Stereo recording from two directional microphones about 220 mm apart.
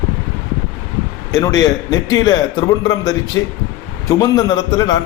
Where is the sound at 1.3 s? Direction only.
15° left (ahead or behind).